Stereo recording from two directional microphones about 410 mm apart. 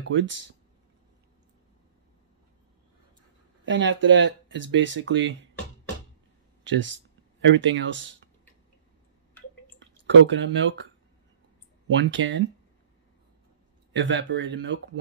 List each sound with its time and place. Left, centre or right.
0.1 s speech: right
3.6 s speech: right
6.6 s speech: right
9.8 s speech: right
11.9 s speech: right
13.9 s speech: right